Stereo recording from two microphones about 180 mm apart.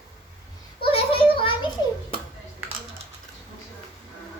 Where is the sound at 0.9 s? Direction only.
30° left (ahead or behind).